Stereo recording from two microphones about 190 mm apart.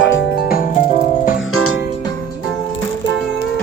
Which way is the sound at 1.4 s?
90° left.